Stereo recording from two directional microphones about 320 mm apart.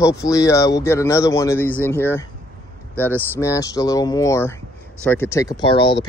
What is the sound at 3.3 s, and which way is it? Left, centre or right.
Speech, centre.